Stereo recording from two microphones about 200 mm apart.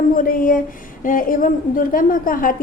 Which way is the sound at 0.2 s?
45° left (ahead or behind).